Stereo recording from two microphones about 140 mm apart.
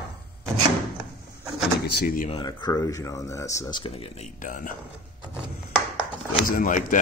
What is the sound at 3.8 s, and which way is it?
Speech, 45° left (ahead or behind).